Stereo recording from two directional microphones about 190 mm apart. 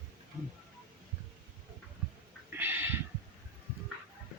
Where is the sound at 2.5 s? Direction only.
10° right (ahead or behind).